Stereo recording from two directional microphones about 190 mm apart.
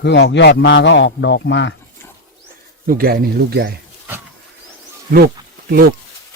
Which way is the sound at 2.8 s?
50° right (ahead or behind).